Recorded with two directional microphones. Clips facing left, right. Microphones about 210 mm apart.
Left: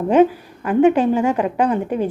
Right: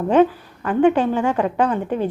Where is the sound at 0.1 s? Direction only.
10° left (ahead or behind).